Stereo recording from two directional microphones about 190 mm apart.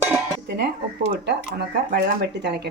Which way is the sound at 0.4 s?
60° right (ahead or behind).